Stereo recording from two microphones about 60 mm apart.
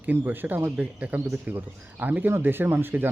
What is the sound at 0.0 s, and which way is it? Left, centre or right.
Speech, right.